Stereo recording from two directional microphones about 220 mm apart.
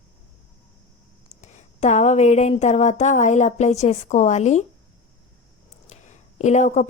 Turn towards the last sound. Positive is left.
turn(degrees=30)  # may be behind; listen again after turning